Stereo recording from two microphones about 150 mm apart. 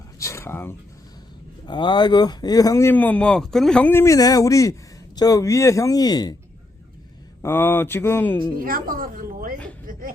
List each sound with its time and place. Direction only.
0.2 s a sound: 20° left (ahead or behind)
1.6 s speech: 30° left (ahead or behind)
7.4 s speech: 15° left (ahead or behind)
8.5 s a woman's voice: 75° right (ahead or behind)